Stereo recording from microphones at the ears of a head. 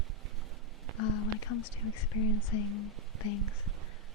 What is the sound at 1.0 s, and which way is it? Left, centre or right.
Speech, left.